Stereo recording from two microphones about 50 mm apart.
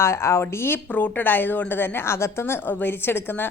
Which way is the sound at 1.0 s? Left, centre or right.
Left.